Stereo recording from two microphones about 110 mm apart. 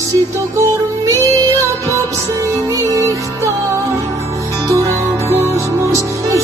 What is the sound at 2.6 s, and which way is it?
Music, 30° right (ahead or behind).